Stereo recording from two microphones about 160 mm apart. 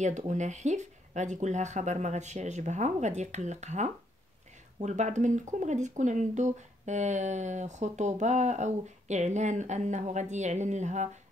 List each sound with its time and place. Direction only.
0.0 s speech: 50° right (ahead or behind)